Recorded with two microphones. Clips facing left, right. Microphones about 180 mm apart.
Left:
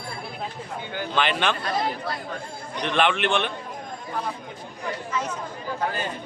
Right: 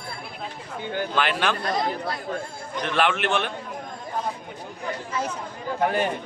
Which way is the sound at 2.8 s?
5° right (ahead or behind).